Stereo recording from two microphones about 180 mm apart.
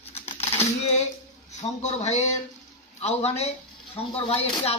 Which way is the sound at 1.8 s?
40° left (ahead or behind).